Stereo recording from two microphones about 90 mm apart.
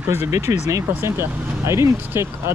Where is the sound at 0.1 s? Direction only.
30° right (ahead or behind).